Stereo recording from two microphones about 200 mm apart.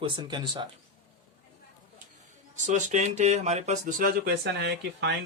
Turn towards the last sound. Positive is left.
turn(degrees=-55)  # may be behind; listen again after turning